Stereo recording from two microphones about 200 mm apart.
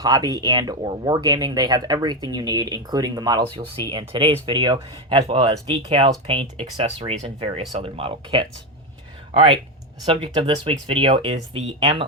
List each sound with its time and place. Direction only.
0.0 s speech: 20° right (ahead or behind)